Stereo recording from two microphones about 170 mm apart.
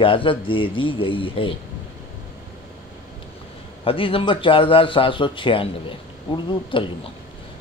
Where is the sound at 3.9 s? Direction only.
30° left (ahead or behind).